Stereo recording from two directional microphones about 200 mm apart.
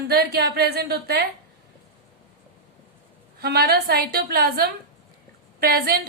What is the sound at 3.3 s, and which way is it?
A woman's voice, 50° right (ahead or behind).